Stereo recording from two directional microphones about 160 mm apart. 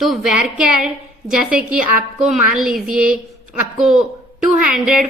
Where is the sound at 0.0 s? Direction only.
5° right (ahead or behind).